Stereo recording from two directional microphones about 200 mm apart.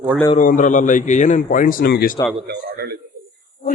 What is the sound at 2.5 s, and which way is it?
Speech, 55° right (ahead or behind).